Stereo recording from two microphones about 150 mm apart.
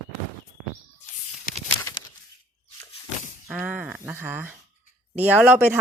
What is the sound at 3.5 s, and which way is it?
Speech, 10° right (ahead or behind).